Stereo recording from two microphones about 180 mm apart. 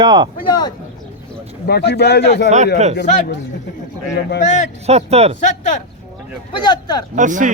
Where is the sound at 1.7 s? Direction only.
65° left (ahead or behind).